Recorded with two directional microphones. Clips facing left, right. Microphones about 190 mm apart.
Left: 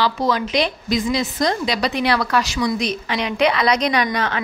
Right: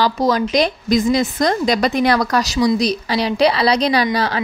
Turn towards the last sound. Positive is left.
turn(degrees=-35)  # may be behind; listen again after turning